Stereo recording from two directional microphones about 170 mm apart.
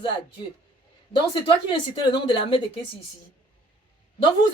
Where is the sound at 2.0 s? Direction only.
30° left (ahead or behind).